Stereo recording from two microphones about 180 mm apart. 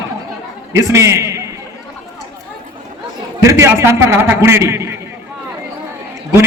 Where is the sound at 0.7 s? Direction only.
15° right (ahead or behind).